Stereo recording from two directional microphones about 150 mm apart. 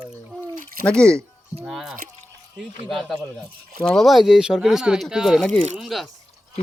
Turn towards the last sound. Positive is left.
turn(degrees=0)  # may be behind; listen again after turning